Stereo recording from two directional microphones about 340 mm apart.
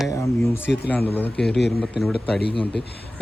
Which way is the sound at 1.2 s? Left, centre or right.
Centre.